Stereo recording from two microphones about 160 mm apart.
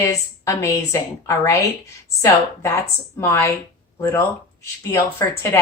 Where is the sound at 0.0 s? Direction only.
20° left (ahead or behind).